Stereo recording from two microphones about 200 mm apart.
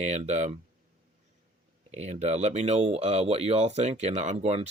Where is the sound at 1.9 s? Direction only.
35° right (ahead or behind).